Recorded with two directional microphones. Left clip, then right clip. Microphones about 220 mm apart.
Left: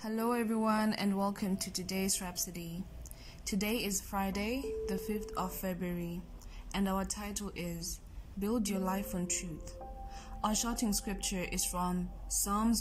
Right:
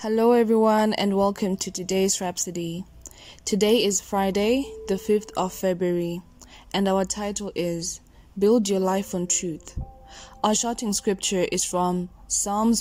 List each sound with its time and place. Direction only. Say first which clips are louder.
0.0 s speech: right 15 dB; 30° right (ahead or behind)